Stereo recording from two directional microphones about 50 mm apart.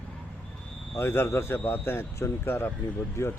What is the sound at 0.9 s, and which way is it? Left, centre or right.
A man's voice, left.